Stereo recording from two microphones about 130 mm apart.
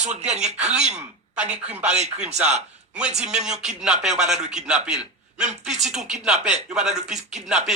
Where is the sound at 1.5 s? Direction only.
55° right (ahead or behind).